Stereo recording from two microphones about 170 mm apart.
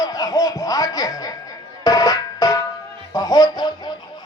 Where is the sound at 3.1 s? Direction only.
20° left (ahead or behind).